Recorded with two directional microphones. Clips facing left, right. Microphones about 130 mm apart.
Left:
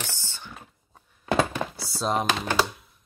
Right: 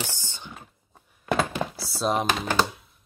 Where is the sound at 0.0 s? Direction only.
15° right (ahead or behind).